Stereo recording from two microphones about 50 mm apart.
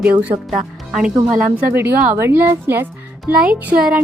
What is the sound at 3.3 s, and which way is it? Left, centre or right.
Music, right.